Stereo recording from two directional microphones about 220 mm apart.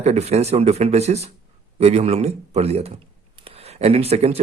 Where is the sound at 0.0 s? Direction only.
30° right (ahead or behind).